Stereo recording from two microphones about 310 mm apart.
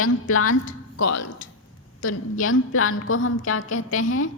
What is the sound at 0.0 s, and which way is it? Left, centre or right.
Speech, left.